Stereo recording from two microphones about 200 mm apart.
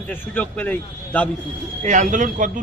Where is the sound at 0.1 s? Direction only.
10° left (ahead or behind).